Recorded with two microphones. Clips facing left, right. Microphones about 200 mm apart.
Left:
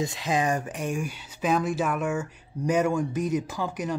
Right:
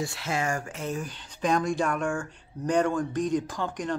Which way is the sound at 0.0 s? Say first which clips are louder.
Left 4 dB; 15° left (ahead or behind).